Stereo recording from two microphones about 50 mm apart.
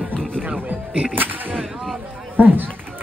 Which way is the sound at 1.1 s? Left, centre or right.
Right.